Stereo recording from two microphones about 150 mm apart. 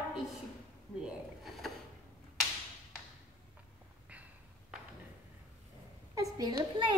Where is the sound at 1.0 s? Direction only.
Centre (ahead or behind).